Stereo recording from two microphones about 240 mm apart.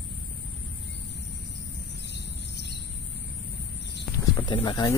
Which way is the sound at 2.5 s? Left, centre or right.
Left.